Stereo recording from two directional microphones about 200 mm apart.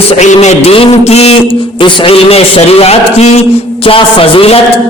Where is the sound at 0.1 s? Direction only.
35° left (ahead or behind).